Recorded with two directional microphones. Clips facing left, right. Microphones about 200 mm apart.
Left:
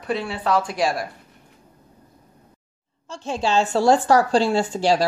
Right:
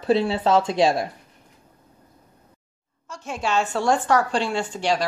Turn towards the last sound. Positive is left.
turn(degrees=35)  # may be behind; listen again after turning